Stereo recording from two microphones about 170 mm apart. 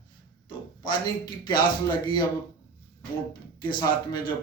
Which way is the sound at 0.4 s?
25° left (ahead or behind).